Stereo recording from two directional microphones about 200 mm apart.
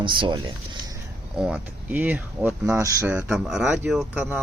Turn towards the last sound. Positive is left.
turn(degrees=-10)  # may be behind; listen again after turning